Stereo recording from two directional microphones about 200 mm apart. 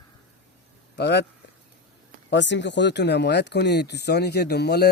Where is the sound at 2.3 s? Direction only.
60° left (ahead or behind).